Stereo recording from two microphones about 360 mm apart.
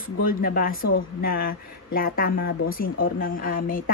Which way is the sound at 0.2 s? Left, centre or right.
Left.